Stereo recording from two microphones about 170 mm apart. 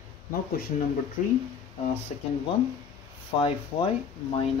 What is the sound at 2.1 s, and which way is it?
Speech, 45° left (ahead or behind).